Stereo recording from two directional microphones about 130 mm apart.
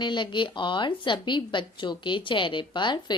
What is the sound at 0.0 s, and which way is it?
A woman's voice, 35° left (ahead or behind).